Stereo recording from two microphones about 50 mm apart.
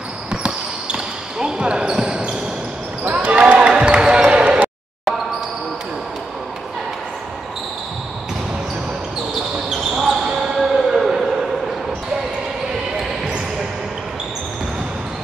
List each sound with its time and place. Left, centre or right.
0.3 s basketball bounce: right
9.7 s basketball bounce: centre